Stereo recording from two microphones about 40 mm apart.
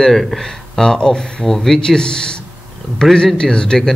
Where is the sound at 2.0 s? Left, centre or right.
Centre.